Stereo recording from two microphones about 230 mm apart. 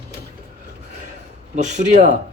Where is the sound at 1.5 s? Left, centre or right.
Right.